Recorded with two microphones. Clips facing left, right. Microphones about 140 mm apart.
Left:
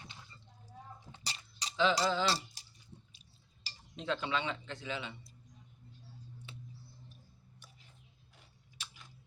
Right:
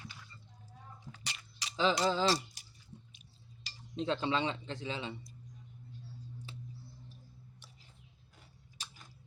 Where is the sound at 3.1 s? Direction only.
35° left (ahead or behind).